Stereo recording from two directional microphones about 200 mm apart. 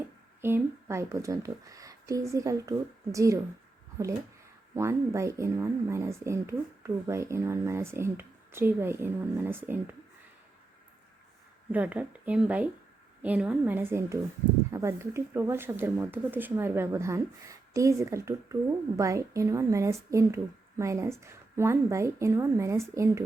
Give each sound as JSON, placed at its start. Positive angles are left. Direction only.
{"t": 0.4, "sound": "speech", "side_deg": -10}
{"t": 4.7, "sound": "speech", "side_deg": -15}
{"t": 11.7, "sound": "speech", "side_deg": -5}